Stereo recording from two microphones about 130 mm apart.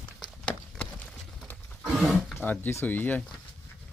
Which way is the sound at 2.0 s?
Centre (ahead or behind).